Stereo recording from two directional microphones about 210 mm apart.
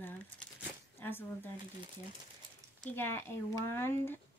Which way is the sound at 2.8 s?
10° left (ahead or behind).